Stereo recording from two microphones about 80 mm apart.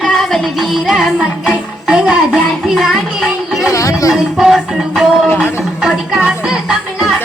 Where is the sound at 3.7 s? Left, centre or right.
Left.